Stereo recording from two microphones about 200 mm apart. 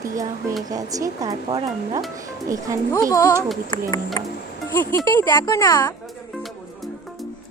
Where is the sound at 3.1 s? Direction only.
15° left (ahead or behind).